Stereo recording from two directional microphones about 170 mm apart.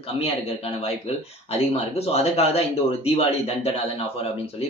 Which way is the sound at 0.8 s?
35° left (ahead or behind).